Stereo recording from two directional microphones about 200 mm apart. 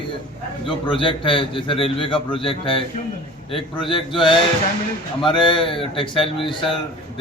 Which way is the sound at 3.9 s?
25° left (ahead or behind).